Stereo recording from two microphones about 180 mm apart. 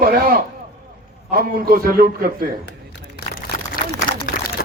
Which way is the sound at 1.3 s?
55° right (ahead or behind).